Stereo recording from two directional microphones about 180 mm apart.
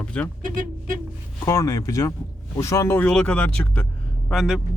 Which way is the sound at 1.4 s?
15° left (ahead or behind).